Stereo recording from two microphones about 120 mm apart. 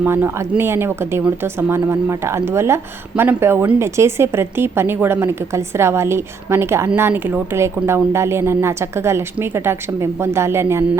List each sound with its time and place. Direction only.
0.0 s speech: 20° right (ahead or behind)